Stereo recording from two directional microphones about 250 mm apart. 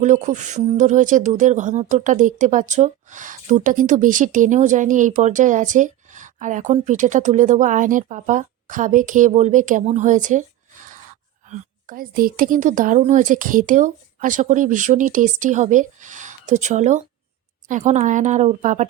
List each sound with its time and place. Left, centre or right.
0.0 s speech: right